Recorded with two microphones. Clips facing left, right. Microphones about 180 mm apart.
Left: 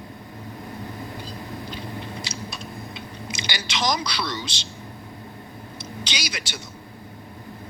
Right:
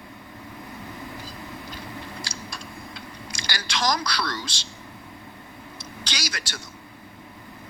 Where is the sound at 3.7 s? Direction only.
25° left (ahead or behind).